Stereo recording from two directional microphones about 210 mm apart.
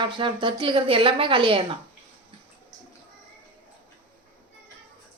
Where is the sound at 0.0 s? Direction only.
25° right (ahead or behind).